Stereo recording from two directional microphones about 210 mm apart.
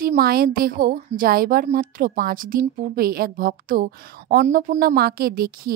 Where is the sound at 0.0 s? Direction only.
45° right (ahead or behind).